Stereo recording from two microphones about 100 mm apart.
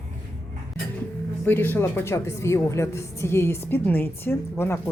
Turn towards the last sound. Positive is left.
turn(degrees=25)  # may be behind; listen again after turning